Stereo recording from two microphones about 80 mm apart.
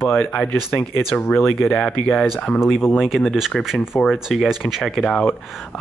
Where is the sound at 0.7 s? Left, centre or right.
Left.